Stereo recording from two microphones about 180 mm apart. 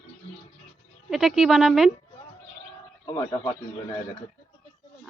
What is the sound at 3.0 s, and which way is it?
Speech, 20° left (ahead or behind).